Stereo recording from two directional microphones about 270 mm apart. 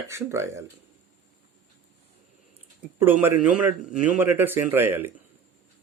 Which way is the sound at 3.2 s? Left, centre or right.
Centre.